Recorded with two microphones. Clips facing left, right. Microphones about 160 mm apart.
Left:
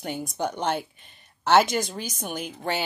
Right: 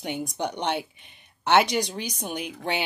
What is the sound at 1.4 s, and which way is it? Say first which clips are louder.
Speech: left 1 dB; 5° left (ahead or behind).